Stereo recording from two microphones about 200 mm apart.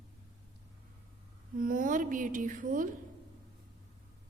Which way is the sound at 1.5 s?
45° right (ahead or behind).